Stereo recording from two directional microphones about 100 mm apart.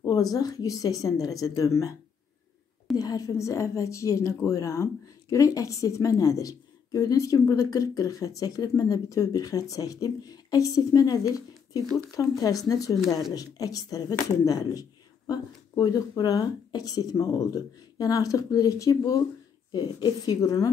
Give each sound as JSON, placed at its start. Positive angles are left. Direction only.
{"t": 0.0, "sound": "speech", "side_deg": 35}
{"t": 3.0, "sound": "speech", "side_deg": 40}